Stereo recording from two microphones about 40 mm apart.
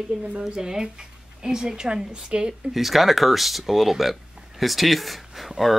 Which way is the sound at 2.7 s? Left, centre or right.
Centre.